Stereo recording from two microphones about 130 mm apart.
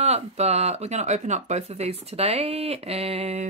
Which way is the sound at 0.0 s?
55° right (ahead or behind).